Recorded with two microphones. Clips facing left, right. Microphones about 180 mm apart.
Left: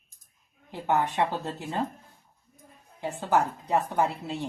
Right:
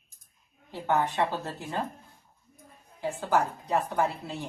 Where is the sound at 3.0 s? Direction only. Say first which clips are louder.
Left 1 dB; 20° left (ahead or behind).